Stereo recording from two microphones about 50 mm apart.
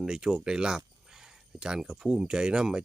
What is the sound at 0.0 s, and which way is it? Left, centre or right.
Speech, centre.